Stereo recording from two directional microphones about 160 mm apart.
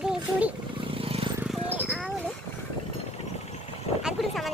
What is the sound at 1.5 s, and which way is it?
Horse, 10° right (ahead or behind).